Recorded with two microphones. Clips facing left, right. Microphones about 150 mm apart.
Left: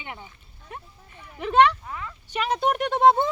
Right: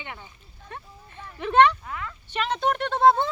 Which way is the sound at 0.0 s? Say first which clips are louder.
Left 1 dB; 15° left (ahead or behind).